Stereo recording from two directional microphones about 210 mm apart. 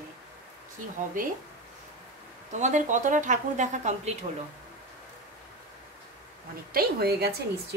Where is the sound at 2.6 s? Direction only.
35° right (ahead or behind).